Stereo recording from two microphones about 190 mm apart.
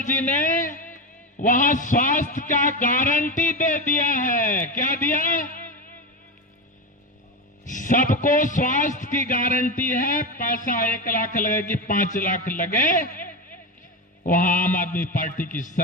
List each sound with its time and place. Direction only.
0.0 s a man's voice: 40° left (ahead or behind)
7.6 s a man's voice: 45° left (ahead or behind)